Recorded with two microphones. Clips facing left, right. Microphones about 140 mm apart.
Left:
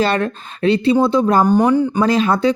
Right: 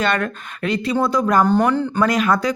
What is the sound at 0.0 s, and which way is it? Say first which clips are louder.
Speech: left 3 dB; 30° left (ahead or behind).